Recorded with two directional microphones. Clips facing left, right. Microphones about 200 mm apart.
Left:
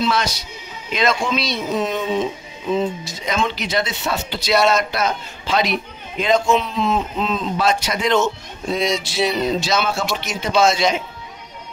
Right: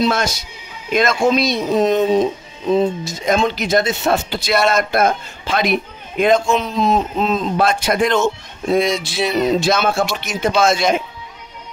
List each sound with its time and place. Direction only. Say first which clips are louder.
0.0 s speech: right 3 dB; 50° right (ahead or behind)
6.6 s speech: right 4 dB; 40° right (ahead or behind)